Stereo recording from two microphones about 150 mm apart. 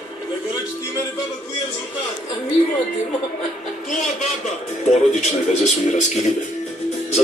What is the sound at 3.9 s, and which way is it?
A man's voice, 50° left (ahead or behind).